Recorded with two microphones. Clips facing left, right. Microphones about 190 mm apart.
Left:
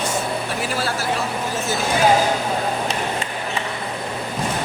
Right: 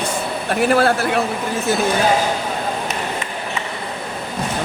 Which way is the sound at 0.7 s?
60° right (ahead or behind).